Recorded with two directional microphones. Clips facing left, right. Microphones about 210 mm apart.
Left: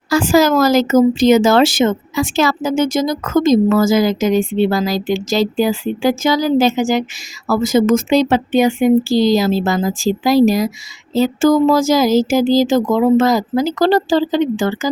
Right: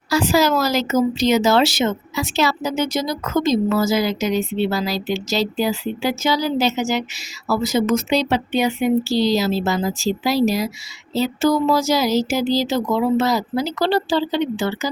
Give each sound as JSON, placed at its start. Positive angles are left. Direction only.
{"t": 0.1, "sound": "speech", "side_deg": 50}